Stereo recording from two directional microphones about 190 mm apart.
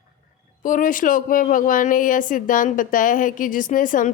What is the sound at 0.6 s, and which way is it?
Speech, 45° left (ahead or behind).